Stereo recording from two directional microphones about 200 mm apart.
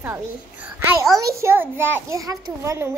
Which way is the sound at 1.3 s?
15° right (ahead or behind).